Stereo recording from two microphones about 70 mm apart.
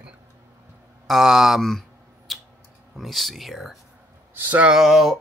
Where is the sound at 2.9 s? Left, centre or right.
Centre.